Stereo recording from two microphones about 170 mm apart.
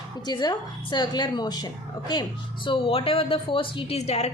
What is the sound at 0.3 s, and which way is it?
A woman's voice, 25° left (ahead or behind).